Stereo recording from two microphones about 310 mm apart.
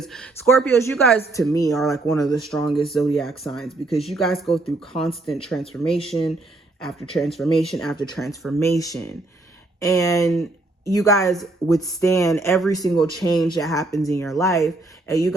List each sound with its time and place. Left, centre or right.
0.0 s speech: centre